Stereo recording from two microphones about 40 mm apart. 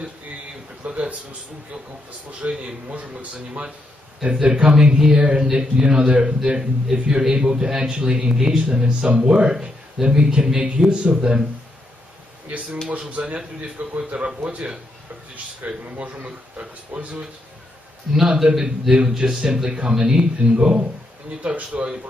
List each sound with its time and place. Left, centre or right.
0.8 s speech: right
2.6 s speech: right
4.2 s speech: right
13.1 s speech: right
18.1 s a man's voice: centre